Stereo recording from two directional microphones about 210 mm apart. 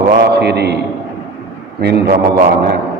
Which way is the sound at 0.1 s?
50° right (ahead or behind).